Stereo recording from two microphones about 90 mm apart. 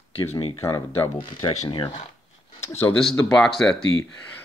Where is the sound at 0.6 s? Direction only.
30° left (ahead or behind).